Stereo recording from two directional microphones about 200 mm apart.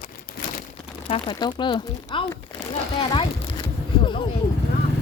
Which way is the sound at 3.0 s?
25° left (ahead or behind).